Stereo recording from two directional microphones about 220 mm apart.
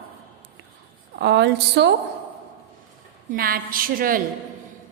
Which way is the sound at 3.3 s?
40° right (ahead or behind).